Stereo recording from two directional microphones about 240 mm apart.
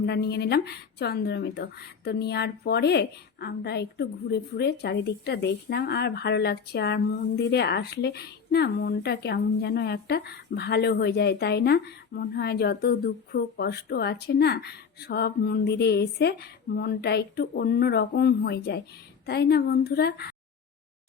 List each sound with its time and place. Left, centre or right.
0.0 s a woman's voice: left